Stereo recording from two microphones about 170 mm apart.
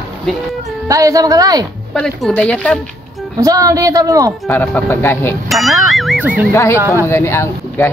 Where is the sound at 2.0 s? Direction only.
5° left (ahead or behind).